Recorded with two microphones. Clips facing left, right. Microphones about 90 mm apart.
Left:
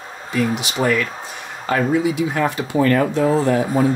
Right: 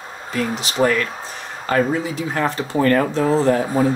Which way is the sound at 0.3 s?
35° right (ahead or behind).